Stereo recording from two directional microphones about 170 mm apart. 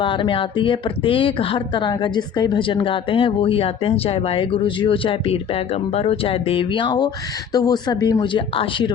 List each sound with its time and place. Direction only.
0.0 s speech: 30° left (ahead or behind)